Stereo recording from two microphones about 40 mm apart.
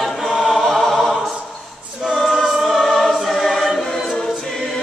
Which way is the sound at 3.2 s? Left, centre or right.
Centre.